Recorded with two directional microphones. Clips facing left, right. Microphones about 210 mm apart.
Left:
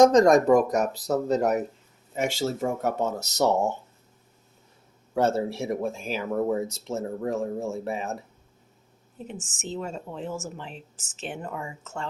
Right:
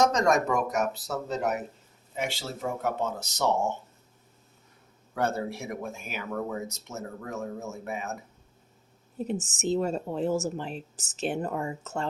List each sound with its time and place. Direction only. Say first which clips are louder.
0.0 s speech: left 7 dB; 35° left (ahead or behind)
5.1 s speech: left 5 dB; 30° left (ahead or behind)
9.1 s a woman's voice: right 7 dB; 40° right (ahead or behind)